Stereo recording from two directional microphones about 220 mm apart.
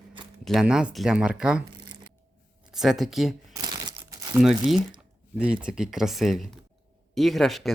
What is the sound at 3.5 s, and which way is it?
Crumpling, 15° right (ahead or behind).